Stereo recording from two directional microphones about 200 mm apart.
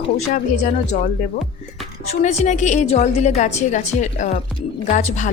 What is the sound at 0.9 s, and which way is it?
A woman's voice, 35° left (ahead or behind).